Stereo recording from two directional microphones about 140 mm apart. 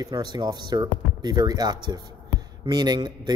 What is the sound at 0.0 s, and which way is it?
Speech, 30° right (ahead or behind).